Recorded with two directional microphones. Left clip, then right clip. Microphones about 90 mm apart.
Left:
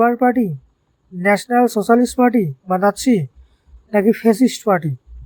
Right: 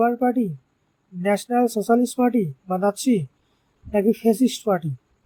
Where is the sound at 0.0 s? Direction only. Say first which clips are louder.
Left 6 dB; 25° left (ahead or behind).